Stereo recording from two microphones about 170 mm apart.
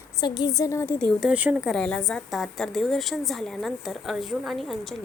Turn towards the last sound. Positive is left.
turn(degrees=0)  # may be behind; listen again after turning